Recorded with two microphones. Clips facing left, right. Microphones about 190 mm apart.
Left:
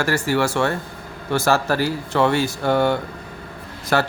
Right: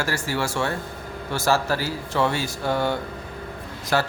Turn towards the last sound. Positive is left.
turn(degrees=60)  # may be behind; listen again after turning